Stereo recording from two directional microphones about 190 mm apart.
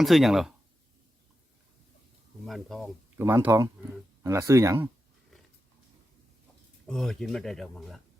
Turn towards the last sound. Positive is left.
turn(degrees=0)  # may be behind; listen again after turning